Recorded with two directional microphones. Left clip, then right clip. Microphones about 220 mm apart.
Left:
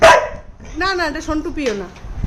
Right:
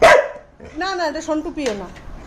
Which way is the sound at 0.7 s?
15° left (ahead or behind).